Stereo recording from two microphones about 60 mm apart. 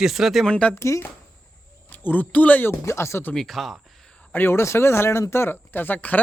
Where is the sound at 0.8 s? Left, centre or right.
Left.